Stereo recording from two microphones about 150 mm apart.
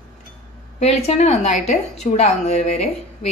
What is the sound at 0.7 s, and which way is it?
A woman's voice, 45° left (ahead or behind).